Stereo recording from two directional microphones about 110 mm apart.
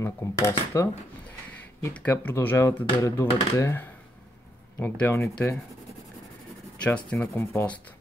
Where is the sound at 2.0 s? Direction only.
20° left (ahead or behind).